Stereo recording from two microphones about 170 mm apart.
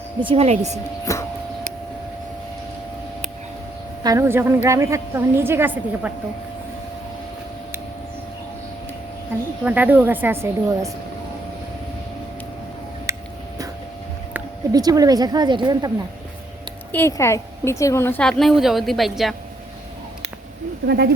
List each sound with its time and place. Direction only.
0.2 s speech: 35° right (ahead or behind)
1.1 s a sound: 20° left (ahead or behind)
4.0 s a woman's voice: 15° right (ahead or behind)
9.6 s a woman's voice: 10° right (ahead or behind)
14.7 s speech: 20° right (ahead or behind)
16.9 s a woman's voice: 15° left (ahead or behind)
20.8 s speech: 75° right (ahead or behind)